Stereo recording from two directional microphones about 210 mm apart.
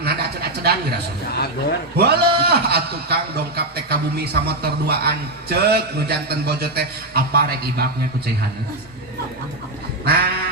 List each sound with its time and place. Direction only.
0.0 s a sound: 50° right (ahead or behind)
2.0 s a man's voice: 50° right (ahead or behind)
10.1 s a man's voice: 50° right (ahead or behind)